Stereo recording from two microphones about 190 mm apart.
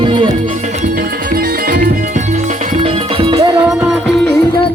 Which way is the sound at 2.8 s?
30° right (ahead or behind).